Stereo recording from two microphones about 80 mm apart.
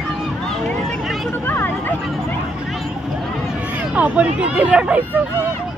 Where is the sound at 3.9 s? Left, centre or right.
Centre.